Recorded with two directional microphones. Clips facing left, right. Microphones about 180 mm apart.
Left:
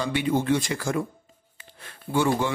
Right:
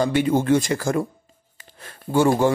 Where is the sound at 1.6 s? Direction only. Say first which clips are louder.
Right 3 dB; 40° right (ahead or behind).